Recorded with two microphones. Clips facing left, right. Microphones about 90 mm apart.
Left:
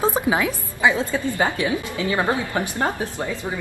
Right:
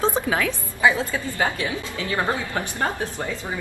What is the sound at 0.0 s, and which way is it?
Speech, 15° left (ahead or behind).